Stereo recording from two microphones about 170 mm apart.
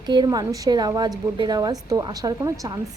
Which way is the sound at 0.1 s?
25° right (ahead or behind).